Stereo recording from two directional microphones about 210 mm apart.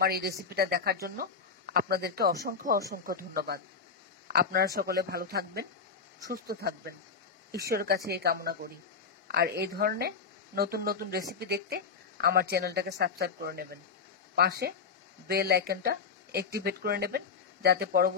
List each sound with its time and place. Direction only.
0.0 s speech: 45° right (ahead or behind)